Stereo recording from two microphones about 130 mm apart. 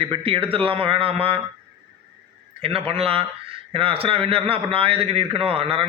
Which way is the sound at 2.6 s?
45° right (ahead or behind).